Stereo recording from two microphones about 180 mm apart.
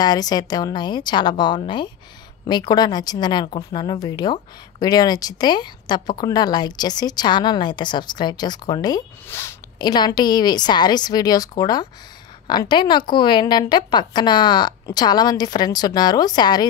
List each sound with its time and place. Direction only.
0.0 s a woman's voice: 20° left (ahead or behind)